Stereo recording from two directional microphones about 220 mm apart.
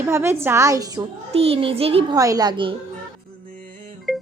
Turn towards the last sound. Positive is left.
turn(degrees=0)  # may be behind; listen again after turning